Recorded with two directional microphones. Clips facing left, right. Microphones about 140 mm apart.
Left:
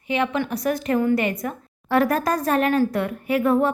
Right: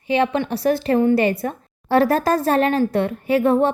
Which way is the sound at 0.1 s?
30° right (ahead or behind).